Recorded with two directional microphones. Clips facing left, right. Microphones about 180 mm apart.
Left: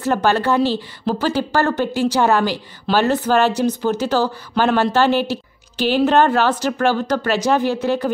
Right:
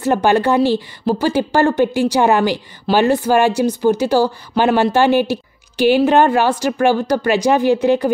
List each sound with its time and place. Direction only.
0.0 s a woman's voice: 15° right (ahead or behind)